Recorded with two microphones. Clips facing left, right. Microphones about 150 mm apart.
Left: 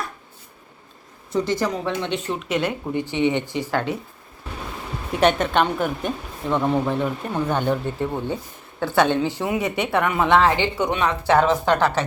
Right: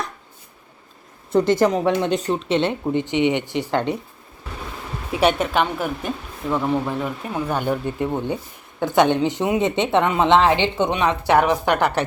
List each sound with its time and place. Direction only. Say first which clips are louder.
1.3 s speech: right 6 dB; 55° right (ahead or behind); by 3.8 s 20° right (ahead or behind)
5.2 s speech: even; 5° right (ahead or behind)